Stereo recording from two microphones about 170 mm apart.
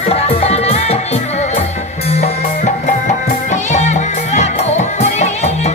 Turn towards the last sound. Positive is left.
turn(degrees=40)  # may be behind; listen again after turning